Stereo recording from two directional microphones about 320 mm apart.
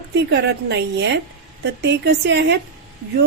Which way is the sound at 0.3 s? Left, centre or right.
Right.